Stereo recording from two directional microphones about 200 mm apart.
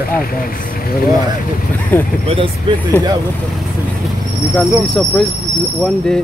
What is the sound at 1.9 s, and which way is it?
Speech, 10° left (ahead or behind).